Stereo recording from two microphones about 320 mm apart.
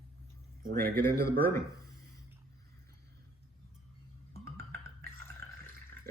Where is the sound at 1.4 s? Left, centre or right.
Centre.